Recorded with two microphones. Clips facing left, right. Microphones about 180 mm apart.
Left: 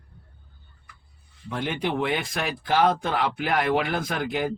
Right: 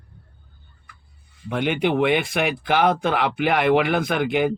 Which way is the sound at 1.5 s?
70° right (ahead or behind).